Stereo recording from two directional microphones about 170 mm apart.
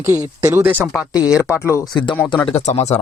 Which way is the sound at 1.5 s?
15° left (ahead or behind).